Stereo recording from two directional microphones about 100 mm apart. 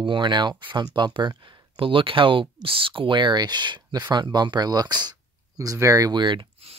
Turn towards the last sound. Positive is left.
turn(degrees=-50)  # may be behind; listen again after turning